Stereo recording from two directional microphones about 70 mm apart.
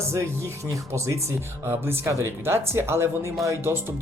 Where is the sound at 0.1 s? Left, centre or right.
Right.